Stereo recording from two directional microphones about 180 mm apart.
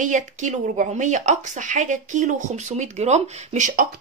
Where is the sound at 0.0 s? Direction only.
45° right (ahead or behind).